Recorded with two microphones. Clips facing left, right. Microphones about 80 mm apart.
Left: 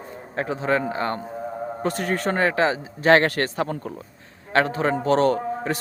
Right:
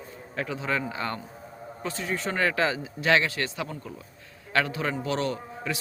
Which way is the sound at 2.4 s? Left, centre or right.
Left.